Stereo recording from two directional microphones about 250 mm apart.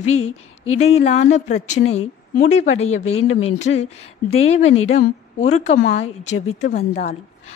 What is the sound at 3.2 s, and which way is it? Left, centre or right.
Speech, left.